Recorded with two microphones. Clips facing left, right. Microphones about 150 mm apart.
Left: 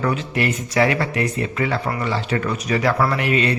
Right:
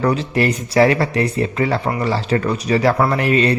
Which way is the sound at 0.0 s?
35° right (ahead or behind).